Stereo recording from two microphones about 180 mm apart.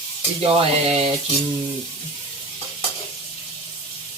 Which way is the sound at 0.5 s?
35° right (ahead or behind).